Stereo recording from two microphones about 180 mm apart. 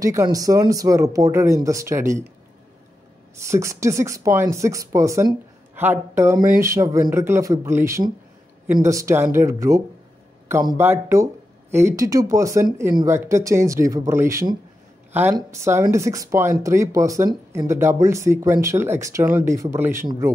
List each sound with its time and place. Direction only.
0.0 s speech: 15° right (ahead or behind)
3.3 s speech: 15° right (ahead or behind)